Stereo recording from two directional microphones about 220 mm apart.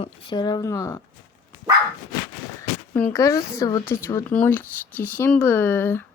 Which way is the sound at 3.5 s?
15° left (ahead or behind).